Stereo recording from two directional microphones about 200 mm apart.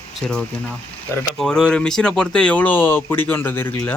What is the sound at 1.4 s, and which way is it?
Speech, 5° left (ahead or behind).